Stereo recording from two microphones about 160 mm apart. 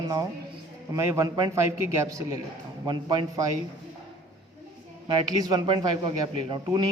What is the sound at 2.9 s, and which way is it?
Speech, 30° right (ahead or behind).